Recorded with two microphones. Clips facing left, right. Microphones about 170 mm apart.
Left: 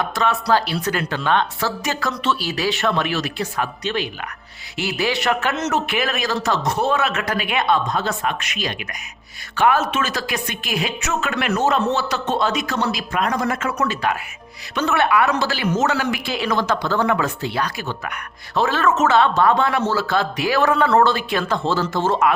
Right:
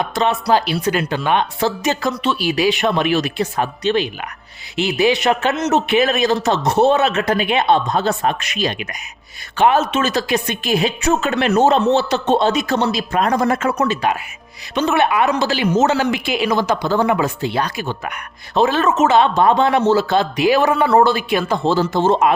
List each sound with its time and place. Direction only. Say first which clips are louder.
0.0 s speech: right 3 dB; 20° right (ahead or behind)
13.8 s speech: right 3 dB; 20° right (ahead or behind)